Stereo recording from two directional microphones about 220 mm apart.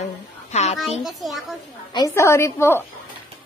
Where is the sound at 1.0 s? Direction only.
Centre (ahead or behind).